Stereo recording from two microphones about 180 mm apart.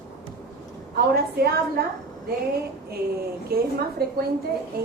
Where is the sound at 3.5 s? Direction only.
60° right (ahead or behind).